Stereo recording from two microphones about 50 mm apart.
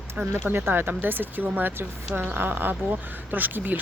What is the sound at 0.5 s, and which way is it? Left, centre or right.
Speech, right.